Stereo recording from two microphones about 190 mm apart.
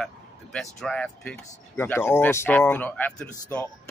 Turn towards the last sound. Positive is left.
turn(degrees=10)  # may be behind; listen again after turning